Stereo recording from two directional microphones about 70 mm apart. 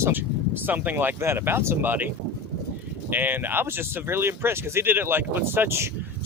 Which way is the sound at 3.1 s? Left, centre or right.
Right.